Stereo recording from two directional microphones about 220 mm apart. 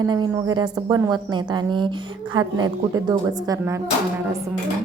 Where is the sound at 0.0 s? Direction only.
20° right (ahead or behind).